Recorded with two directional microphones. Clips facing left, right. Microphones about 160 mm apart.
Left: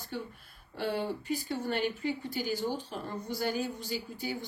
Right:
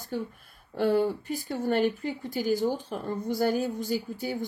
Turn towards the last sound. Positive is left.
turn(degrees=-45)  # may be behind; listen again after turning